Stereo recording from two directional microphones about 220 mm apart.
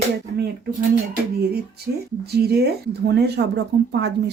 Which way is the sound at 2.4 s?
45° right (ahead or behind).